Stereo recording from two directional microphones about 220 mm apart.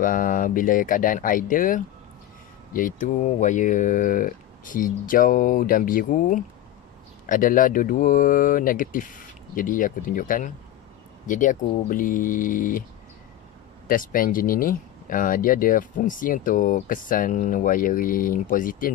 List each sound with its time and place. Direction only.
0.0 s speech: 40° left (ahead or behind)
13.8 s speech: 40° left (ahead or behind)